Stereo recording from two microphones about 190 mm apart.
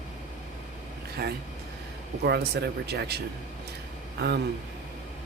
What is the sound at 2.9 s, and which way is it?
Speech, 60° right (ahead or behind).